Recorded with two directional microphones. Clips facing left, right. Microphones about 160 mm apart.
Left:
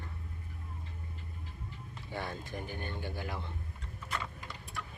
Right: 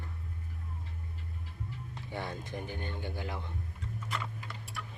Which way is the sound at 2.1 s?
20° right (ahead or behind).